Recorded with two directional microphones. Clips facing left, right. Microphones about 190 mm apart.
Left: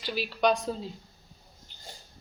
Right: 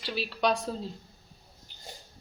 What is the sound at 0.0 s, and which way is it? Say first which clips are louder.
Speech: left 2 dB; centre (ahead or behind).